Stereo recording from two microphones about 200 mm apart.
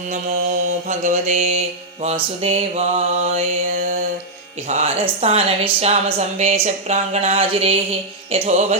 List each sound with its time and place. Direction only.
0.9 s speech: 35° right (ahead or behind)
4.7 s speech: 30° right (ahead or behind)